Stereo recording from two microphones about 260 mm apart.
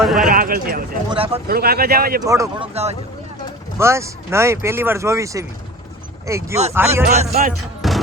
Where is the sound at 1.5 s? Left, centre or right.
Right.